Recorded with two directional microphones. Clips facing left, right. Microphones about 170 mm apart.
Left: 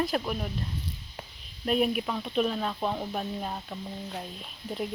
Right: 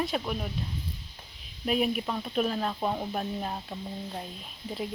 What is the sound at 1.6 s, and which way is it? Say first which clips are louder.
Speech: left 1 dB; centre (ahead or behind).